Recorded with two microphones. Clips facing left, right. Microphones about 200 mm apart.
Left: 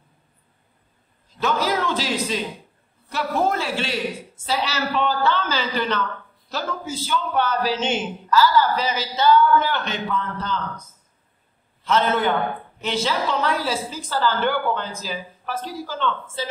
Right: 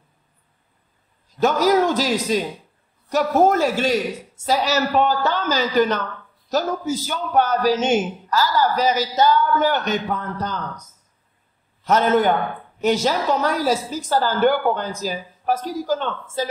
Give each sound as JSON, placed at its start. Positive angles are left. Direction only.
{"t": 1.4, "sound": "a man's voice", "side_deg": -45}